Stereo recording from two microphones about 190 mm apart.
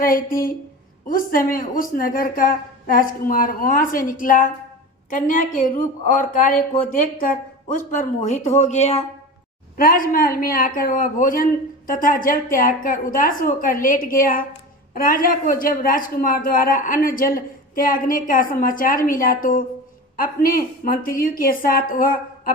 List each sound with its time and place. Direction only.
0.0 s a woman's voice: 45° left (ahead or behind)
9.7 s a woman's voice: 50° left (ahead or behind)